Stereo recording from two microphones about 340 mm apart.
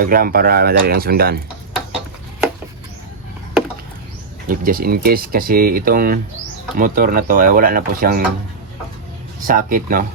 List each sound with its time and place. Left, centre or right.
0.0 s speech: right
4.4 s speech: right
9.5 s speech: right